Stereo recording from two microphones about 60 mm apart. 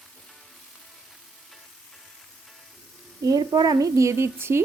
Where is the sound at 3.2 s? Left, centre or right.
Right.